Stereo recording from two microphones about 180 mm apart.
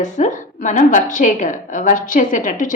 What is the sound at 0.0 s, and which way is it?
Speech, 45° left (ahead or behind).